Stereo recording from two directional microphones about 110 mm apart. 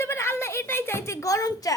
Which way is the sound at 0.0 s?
25° left (ahead or behind).